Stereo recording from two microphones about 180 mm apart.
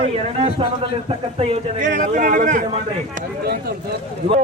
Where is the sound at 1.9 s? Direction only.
45° right (ahead or behind).